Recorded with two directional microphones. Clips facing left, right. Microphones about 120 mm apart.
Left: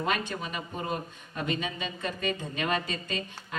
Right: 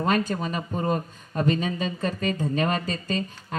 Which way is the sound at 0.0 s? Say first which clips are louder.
Right 6 dB; 40° right (ahead or behind).